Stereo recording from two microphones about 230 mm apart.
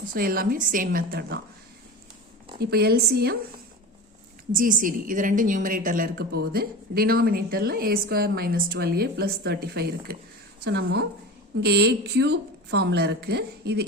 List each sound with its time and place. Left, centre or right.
0.1 s a woman's voice: right
2.6 s a woman's voice: right
4.5 s a woman's voice: right